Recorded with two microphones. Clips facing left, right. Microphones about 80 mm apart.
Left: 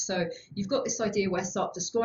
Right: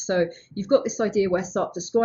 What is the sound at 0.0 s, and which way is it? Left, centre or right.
Speech, right.